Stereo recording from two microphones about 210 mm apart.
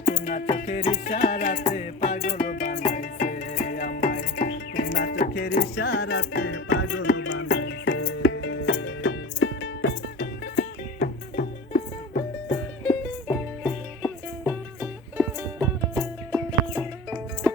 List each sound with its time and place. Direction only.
0.0 s music: 35° left (ahead or behind)
4.9 s music: 50° left (ahead or behind); by 7.1 s 75° left (ahead or behind)
7.3 s music: 90° left
7.5 s music: 60° left (ahead or behind); by 12.2 s 35° left (ahead or behind)
12.9 s music: 10° left (ahead or behind)
14.4 s music: 5° right (ahead or behind)